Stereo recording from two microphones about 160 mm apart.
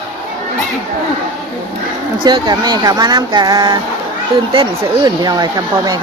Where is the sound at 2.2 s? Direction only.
25° right (ahead or behind).